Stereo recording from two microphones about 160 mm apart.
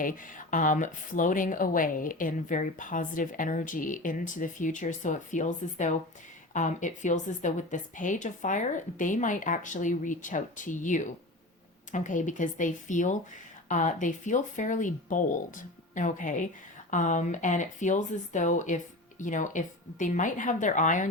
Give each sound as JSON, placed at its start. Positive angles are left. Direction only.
{"t": 0.0, "sound": "a woman's voice", "side_deg": 55}